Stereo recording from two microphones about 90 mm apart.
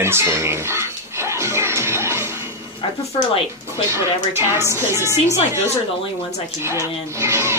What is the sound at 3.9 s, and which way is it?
Speech, 30° right (ahead or behind).